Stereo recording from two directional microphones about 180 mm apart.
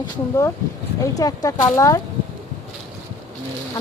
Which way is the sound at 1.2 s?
20° left (ahead or behind).